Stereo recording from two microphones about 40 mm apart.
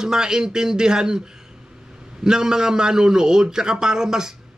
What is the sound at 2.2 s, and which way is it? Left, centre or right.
A man's voice, centre.